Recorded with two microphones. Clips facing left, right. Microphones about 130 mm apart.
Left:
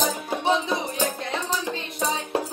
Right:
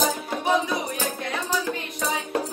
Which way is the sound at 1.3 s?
25° left (ahead or behind).